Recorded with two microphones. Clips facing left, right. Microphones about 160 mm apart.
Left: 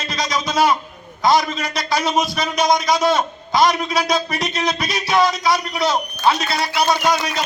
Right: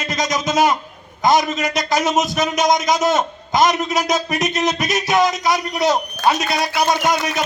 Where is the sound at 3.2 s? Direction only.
20° right (ahead or behind).